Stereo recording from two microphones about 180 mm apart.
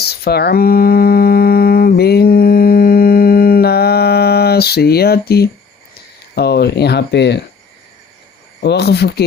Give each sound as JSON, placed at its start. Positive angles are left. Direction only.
{"t": 0.0, "sound": "a sound", "side_deg": 60}
{"t": 6.3, "sound": "speech", "side_deg": 65}
{"t": 8.6, "sound": "speech", "side_deg": 65}